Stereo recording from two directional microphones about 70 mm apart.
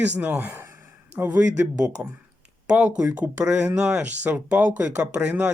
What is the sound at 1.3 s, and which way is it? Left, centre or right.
Speech, right.